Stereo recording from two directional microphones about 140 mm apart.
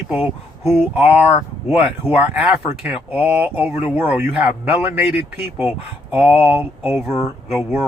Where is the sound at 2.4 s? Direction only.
10° right (ahead or behind).